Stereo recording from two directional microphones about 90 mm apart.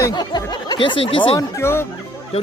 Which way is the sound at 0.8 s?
70° left (ahead or behind).